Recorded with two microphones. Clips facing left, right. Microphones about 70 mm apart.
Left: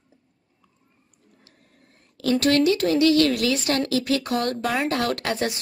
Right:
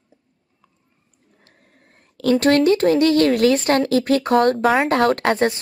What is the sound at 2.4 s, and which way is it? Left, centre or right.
Speech, right.